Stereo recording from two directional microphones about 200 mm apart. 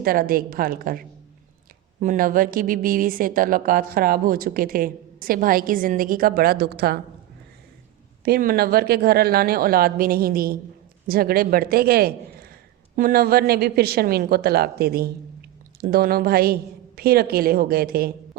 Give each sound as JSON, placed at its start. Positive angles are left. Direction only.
{"t": 0.0, "sound": "speech", "side_deg": -45}
{"t": 8.2, "sound": "speech", "side_deg": -50}